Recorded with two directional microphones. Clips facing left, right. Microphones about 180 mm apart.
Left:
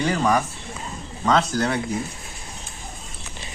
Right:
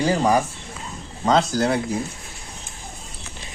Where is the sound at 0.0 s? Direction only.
35° right (ahead or behind).